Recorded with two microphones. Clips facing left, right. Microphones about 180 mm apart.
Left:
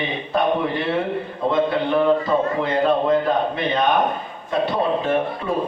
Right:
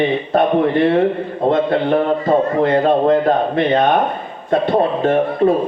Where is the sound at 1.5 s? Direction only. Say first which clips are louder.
Right 4 dB; 50° right (ahead or behind).